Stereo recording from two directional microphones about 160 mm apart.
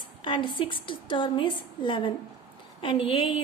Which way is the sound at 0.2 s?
30° left (ahead or behind).